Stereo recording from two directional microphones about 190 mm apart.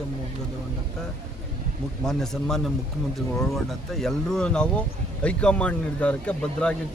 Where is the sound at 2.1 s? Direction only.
Centre (ahead or behind).